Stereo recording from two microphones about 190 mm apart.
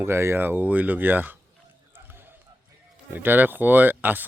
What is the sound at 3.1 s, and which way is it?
Speech, 10° right (ahead or behind).